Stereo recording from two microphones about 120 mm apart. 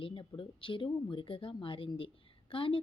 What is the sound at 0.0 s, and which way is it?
A woman's voice, 45° left (ahead or behind).